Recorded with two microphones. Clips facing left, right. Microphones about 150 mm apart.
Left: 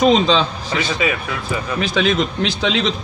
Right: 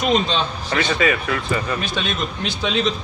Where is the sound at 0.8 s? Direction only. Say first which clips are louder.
Right 1 dB; 5° left (ahead or behind).